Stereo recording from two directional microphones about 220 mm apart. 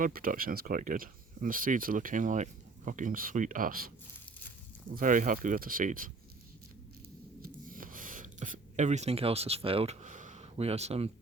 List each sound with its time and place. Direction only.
0.0 s speech: 40° right (ahead or behind)
4.9 s speech: 35° right (ahead or behind)
7.4 s a sound: 40° right (ahead or behind)